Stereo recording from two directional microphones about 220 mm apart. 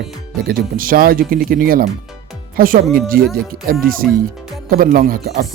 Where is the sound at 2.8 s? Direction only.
Centre (ahead or behind).